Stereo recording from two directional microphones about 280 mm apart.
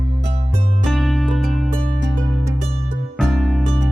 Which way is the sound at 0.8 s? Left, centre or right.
Centre.